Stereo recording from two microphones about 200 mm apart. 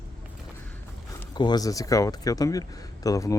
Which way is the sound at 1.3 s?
20° left (ahead or behind).